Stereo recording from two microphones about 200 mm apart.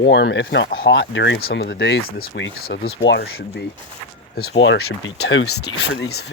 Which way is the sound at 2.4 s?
50° left (ahead or behind).